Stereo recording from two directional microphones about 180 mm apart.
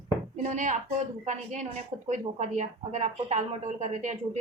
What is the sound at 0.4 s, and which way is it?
A woman's voice, 40° right (ahead or behind).